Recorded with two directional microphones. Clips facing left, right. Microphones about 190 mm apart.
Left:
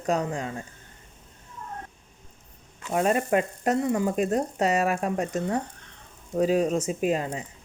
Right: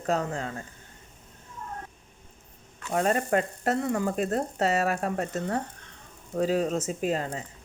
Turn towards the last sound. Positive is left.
turn(degrees=15)  # may be behind; listen again after turning